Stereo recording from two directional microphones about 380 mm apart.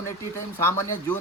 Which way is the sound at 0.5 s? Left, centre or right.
Centre.